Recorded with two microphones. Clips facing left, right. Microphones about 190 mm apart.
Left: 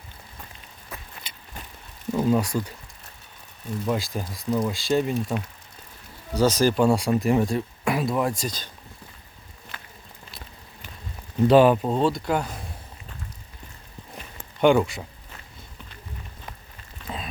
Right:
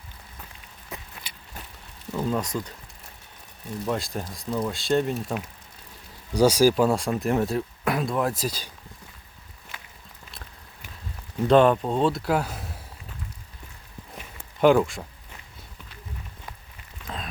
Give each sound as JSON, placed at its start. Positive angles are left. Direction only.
{"t": 0.9, "sound": "vehicle", "side_deg": -20}
{"t": 2.1, "sound": "speech", "side_deg": 10}
{"t": 3.8, "sound": "speech", "side_deg": 0}
{"t": 6.3, "sound": "speech", "side_deg": -10}
{"t": 11.4, "sound": "speech", "side_deg": 5}
{"t": 14.2, "sound": "a sound", "side_deg": 0}